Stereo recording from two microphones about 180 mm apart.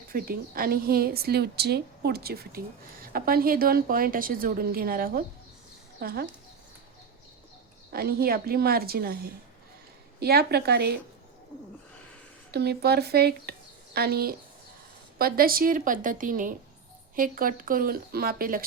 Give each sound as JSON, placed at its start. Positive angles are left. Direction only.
{"t": 0.1, "sound": "a woman's voice", "side_deg": -55}
{"t": 7.9, "sound": "a woman's voice", "side_deg": -55}
{"t": 10.2, "sound": "a woman's voice", "side_deg": -60}
{"t": 12.5, "sound": "a woman's voice", "side_deg": -65}